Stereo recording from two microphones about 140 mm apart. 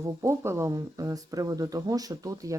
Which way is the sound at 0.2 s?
20° right (ahead or behind).